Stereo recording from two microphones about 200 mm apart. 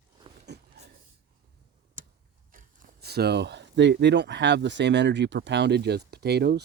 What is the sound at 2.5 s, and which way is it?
Speech, 50° right (ahead or behind).